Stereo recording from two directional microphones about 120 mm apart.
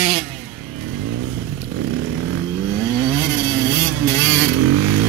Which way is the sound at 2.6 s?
25° left (ahead or behind).